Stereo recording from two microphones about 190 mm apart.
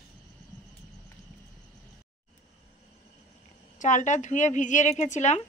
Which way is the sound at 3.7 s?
40° left (ahead or behind).